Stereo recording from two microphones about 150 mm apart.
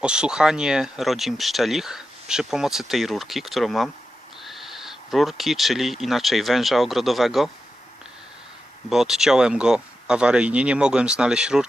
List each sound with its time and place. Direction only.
0.0 s speech: 5° right (ahead or behind)
8.9 s speech: centre (ahead or behind)